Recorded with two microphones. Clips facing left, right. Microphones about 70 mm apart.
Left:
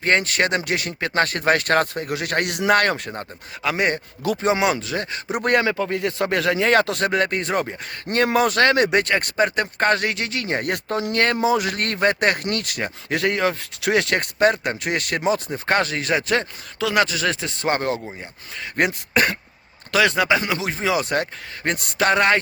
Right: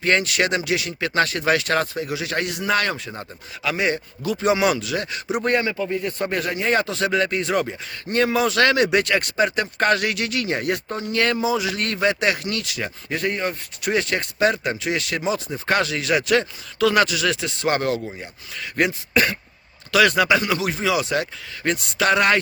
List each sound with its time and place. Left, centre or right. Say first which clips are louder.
0.0 s speech: even; left
3.6 s speech: left 1 dB; left
4.4 s speech: right 1 dB; left
5.4 s speech: left 3 dB; left
7.0 s speech: even; left
8.1 s speech: left 1 dB; left
11.1 s speech: left 1 dB; left
13.1 s speech: left 4 dB; left
14.3 s speech: left 1 dB; left
16.8 s speech: right 2 dB; centre
17.1 s speech: right 1 dB; left
18.8 s speech: even; left
20.0 s speech: right 1 dB; left
21.1 s speech: left 1 dB; left